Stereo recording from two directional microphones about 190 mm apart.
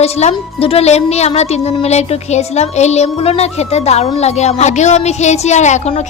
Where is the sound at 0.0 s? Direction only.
35° left (ahead or behind).